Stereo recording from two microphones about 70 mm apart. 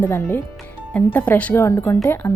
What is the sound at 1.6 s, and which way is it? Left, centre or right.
Speech, left.